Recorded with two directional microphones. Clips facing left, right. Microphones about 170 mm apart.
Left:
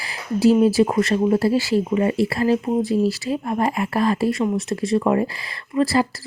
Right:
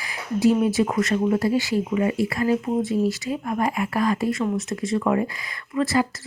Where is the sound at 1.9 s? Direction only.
35° left (ahead or behind).